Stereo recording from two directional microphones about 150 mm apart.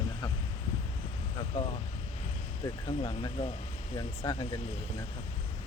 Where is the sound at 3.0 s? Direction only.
35° left (ahead or behind).